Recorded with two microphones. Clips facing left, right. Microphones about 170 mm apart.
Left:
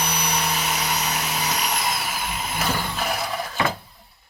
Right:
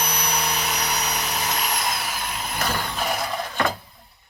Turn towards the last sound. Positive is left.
turn(degrees=0)  # may be behind; listen again after turning